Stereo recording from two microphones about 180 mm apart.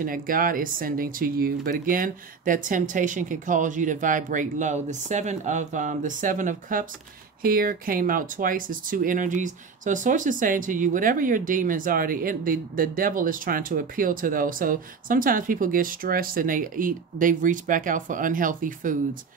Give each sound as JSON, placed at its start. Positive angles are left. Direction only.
{"t": 0.0, "sound": "speech", "side_deg": -50}